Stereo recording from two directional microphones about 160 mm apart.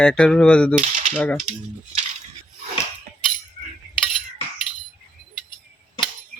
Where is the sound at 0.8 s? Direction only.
50° right (ahead or behind).